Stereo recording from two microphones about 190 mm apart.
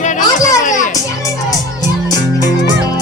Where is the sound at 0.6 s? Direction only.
40° left (ahead or behind).